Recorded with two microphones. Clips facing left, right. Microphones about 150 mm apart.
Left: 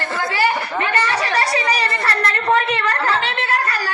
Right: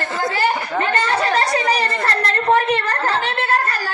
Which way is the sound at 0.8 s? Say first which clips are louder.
Right 2 dB; 50° right (ahead or behind).